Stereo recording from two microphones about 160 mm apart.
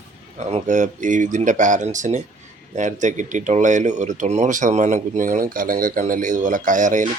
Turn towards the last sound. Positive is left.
turn(degrees=-55)  # may be behind; listen again after turning